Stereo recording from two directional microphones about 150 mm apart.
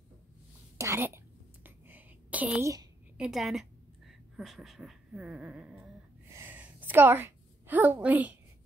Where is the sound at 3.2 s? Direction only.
Centre (ahead or behind).